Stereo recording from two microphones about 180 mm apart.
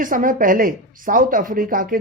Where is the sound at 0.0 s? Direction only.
50° right (ahead or behind).